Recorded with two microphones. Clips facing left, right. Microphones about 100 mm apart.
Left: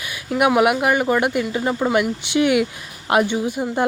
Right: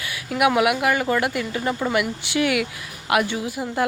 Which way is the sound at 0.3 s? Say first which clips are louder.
Left 3 dB; 25° left (ahead or behind).